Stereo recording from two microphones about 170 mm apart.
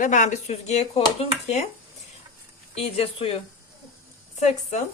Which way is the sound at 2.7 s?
35° left (ahead or behind).